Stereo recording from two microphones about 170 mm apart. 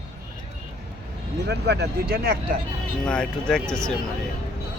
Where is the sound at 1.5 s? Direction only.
75° right (ahead or behind).